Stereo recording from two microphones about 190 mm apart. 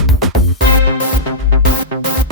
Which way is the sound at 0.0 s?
Centre (ahead or behind).